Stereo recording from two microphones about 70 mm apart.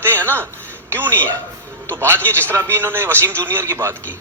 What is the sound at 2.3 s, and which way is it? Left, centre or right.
A man's voice, right.